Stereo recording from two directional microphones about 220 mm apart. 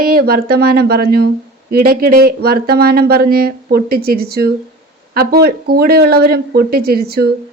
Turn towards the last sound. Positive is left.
turn(degrees=-45)  # may be behind; listen again after turning